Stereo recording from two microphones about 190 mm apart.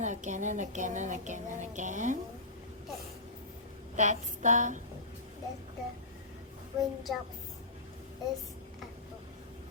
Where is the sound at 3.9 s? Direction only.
40° right (ahead or behind).